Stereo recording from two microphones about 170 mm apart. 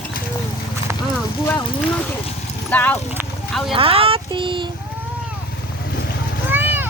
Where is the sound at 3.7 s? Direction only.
35° right (ahead or behind).